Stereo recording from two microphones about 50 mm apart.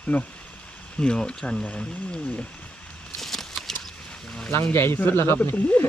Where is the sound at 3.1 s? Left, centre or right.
Centre.